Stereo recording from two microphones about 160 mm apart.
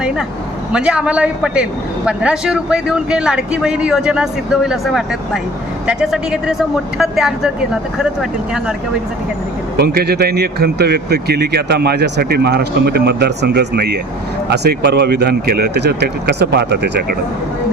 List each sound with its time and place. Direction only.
0.7 s a man's voice: 5° right (ahead or behind)
9.7 s speech: 80° right